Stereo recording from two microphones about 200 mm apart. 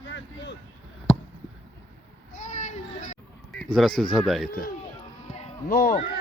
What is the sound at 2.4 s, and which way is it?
Children playing, 35° left (ahead or behind).